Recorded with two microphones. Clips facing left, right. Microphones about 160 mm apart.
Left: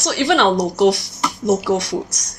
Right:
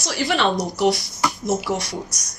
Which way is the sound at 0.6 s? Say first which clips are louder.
Left 5 dB; 85° left.